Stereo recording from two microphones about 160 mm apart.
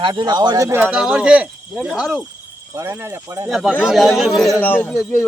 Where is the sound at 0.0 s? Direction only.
25° right (ahead or behind).